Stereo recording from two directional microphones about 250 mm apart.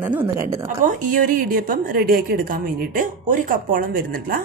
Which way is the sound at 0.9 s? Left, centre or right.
Right.